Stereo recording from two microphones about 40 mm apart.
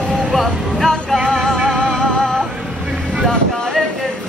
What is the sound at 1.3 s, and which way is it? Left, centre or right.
Music, centre.